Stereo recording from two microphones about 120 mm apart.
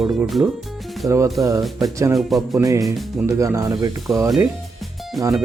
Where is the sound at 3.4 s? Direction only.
25° right (ahead or behind).